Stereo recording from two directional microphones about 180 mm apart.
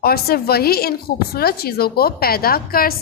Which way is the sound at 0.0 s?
60° left (ahead or behind).